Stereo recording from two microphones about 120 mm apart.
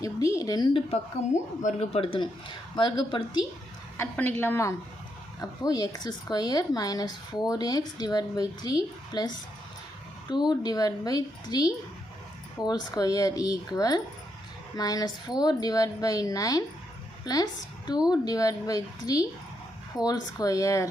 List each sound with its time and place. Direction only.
0.0 s speech: 30° left (ahead or behind)
1.6 s speech: 60° left (ahead or behind); by 3.4 s 40° left (ahead or behind)
3.9 s speech: 20° left (ahead or behind)
5.4 s a woman's voice: 30° left (ahead or behind)